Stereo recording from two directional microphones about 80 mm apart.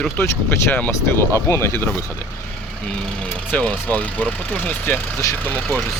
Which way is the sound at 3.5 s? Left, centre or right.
Centre.